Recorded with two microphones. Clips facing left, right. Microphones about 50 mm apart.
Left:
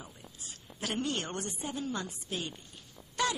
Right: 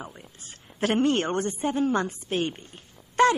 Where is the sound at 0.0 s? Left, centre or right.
Right.